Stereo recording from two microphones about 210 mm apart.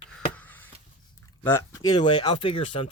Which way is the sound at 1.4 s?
10° left (ahead or behind).